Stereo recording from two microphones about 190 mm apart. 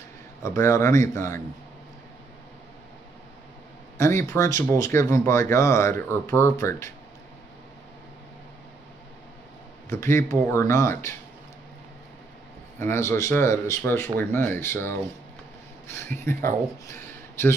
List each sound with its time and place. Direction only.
0.4 s speech: 15° left (ahead or behind)
4.0 s speech: 15° left (ahead or behind)
9.8 s speech: 15° left (ahead or behind)
12.7 s speech: 15° left (ahead or behind)